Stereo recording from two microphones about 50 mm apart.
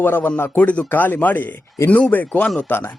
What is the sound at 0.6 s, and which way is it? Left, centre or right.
Speech, left.